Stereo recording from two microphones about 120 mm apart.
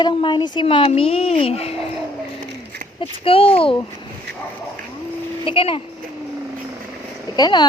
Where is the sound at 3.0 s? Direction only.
50° left (ahead or behind).